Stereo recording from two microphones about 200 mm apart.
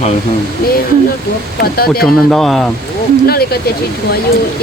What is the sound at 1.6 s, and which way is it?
Speech, 50° left (ahead or behind).